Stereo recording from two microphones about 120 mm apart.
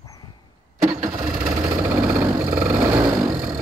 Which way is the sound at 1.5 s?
25° right (ahead or behind).